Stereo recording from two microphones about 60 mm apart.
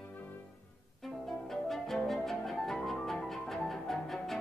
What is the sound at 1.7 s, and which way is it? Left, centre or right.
Music, centre.